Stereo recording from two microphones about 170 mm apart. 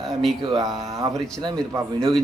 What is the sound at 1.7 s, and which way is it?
Speech, 20° right (ahead or behind).